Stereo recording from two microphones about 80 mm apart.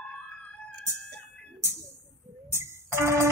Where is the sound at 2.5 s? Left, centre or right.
Right.